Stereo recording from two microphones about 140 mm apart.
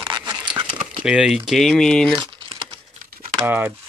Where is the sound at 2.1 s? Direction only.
35° right (ahead or behind).